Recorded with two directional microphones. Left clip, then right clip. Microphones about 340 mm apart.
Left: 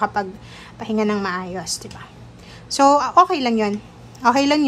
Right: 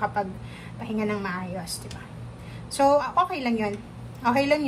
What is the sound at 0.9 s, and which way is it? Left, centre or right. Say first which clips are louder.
Speech: left 7 dB; centre.